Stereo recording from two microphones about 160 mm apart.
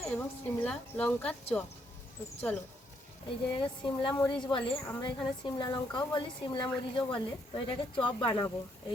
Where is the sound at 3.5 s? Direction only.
30° left (ahead or behind).